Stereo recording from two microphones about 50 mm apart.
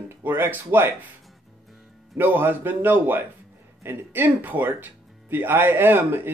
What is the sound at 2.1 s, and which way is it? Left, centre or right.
Speech, right.